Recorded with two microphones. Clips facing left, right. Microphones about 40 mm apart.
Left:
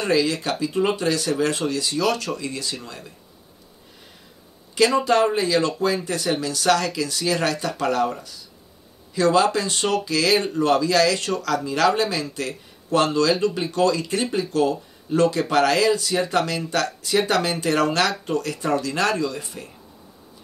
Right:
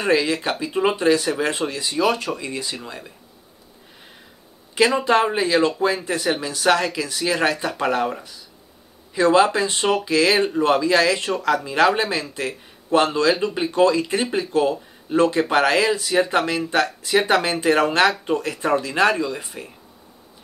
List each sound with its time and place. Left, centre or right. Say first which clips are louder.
0.0 s speech: right 1 dB; centre
4.7 s speech: right 1 dB; centre